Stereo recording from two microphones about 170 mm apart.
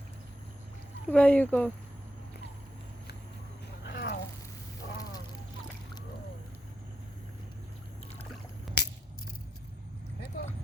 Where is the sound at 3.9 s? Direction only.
90° left.